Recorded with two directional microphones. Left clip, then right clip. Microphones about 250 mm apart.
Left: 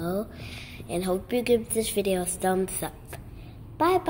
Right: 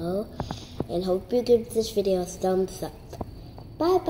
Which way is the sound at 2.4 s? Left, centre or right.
Centre.